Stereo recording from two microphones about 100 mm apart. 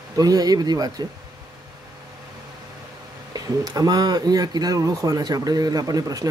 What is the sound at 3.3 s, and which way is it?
Speech, 40° right (ahead or behind).